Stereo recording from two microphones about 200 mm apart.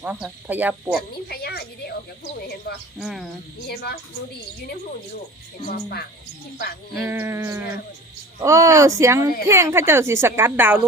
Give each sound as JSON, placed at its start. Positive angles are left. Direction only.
{"t": 0.0, "sound": "a woman's voice", "side_deg": -5}
{"t": 1.1, "sound": "a sound", "side_deg": 50}
{"t": 2.7, "sound": "speech", "side_deg": 50}
{"t": 3.0, "sound": "speech", "side_deg": 0}
{"t": 3.7, "sound": "speech", "side_deg": 50}
{"t": 5.6, "sound": "speech", "side_deg": 50}
{"t": 7.0, "sound": "a woman's voice", "side_deg": -15}